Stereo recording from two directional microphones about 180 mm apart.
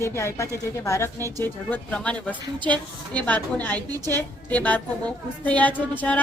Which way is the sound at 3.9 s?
20° right (ahead or behind).